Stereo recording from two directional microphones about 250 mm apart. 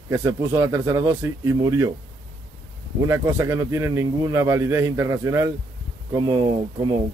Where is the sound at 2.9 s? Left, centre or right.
Centre.